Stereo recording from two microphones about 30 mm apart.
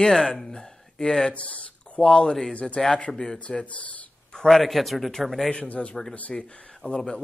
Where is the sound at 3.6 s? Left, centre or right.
Left.